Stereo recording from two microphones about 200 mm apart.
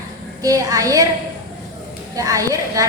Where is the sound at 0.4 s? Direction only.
15° right (ahead or behind).